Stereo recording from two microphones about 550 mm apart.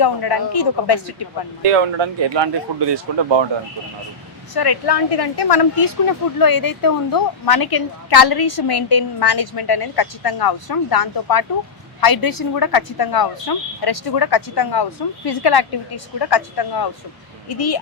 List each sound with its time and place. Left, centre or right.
0.0 s speech: left
1.6 s speech: right
4.5 s speech: left